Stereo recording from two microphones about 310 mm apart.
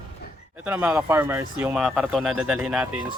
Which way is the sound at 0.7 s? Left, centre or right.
Centre.